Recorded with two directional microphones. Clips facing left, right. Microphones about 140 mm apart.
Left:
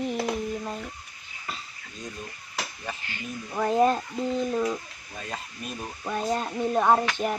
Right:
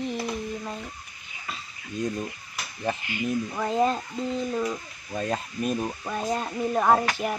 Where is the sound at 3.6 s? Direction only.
5° left (ahead or behind).